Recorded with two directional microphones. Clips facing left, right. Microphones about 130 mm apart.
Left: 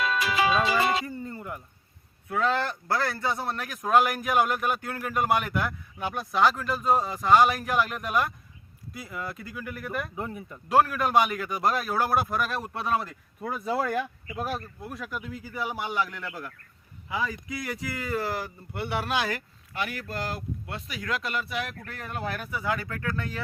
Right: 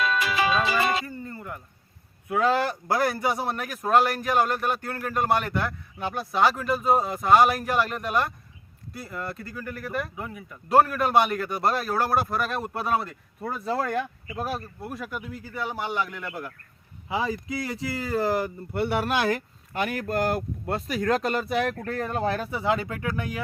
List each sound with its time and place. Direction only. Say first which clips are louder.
0.4 s speech: left 1 dB; 20° left (ahead or behind)
2.3 s a man's voice: right 3 dB; 10° right (ahead or behind)
10.2 s speech: left 2 dB; 30° left (ahead or behind)
10.7 s a man's voice: right 2 dB; centre (ahead or behind)
14.3 s a man's voice: right 1 dB; 5° right (ahead or behind)
15.4 s a man's voice: right 2 dB; 10° left (ahead or behind); by 16.5 s 10° right (ahead or behind)
17.1 s speech: right 4 dB; 25° right (ahead or behind)
18.3 s speech: right 7 dB; 55° right (ahead or behind); by 23.4 s 15° right (ahead or behind)